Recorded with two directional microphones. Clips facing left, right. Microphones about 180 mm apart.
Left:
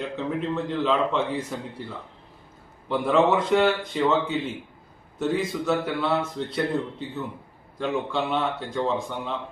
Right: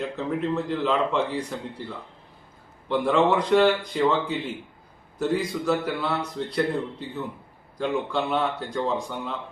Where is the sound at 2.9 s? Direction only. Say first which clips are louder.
Even; 5° left (ahead or behind).